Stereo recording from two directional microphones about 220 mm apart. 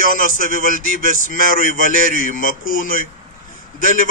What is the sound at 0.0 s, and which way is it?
A man's voice, 40° left (ahead or behind).